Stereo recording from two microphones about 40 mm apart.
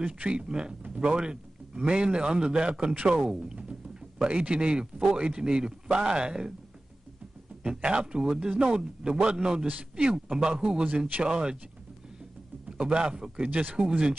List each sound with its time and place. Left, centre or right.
0.0 s a man's voice: right
7.8 s a man's voice: right
9.7 s a man's voice: right
10.3 s a man's voice: right
12.6 s a man's voice: right
13.5 s speech: right
13.7 s a man's voice: right